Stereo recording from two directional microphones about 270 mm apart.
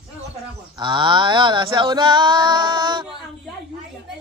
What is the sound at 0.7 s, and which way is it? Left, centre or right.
Male singing, centre.